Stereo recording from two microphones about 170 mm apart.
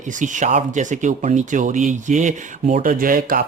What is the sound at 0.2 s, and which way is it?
Speech, 45° right (ahead or behind).